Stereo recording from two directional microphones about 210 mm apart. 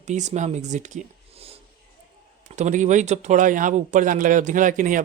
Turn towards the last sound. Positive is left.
turn(degrees=-40)  # may be behind; listen again after turning